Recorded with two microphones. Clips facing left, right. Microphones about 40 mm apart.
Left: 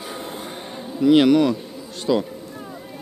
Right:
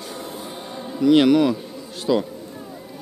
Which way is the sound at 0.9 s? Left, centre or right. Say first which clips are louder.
Even; centre.